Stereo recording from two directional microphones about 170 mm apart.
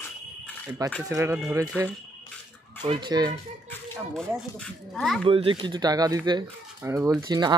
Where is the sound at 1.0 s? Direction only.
15° right (ahead or behind).